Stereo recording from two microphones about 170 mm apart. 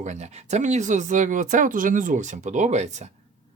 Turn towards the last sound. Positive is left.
turn(degrees=-40)  # may be behind; listen again after turning